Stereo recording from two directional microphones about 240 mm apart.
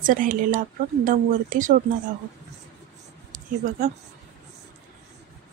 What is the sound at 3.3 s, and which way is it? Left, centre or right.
Speech, right.